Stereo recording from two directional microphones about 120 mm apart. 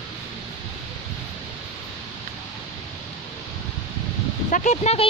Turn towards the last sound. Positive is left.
turn(degrees=65)  # may be behind; listen again after turning